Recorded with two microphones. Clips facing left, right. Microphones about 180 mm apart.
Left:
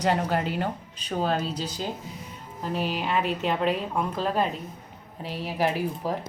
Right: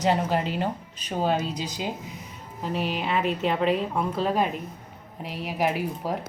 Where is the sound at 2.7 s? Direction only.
40° left (ahead or behind).